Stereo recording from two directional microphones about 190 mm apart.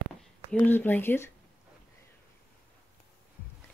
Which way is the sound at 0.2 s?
5° left (ahead or behind).